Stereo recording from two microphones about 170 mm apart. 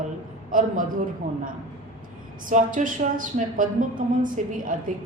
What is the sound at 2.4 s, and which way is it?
A woman's voice, 50° right (ahead or behind).